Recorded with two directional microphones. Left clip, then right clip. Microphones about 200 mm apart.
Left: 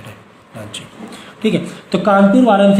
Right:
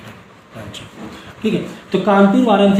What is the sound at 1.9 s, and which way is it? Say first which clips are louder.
Speech: left 2 dB; 60° left (ahead or behind).